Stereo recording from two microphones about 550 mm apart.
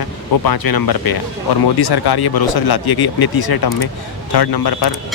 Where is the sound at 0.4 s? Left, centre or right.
Left.